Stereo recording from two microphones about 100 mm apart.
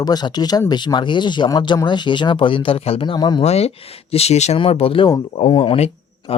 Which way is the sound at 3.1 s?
45° left (ahead or behind).